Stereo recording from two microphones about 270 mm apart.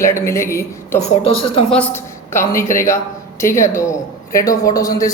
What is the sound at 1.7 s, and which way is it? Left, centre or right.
A man's voice, centre.